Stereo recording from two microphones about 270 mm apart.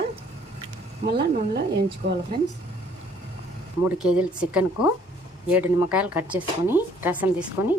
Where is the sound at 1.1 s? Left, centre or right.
Right.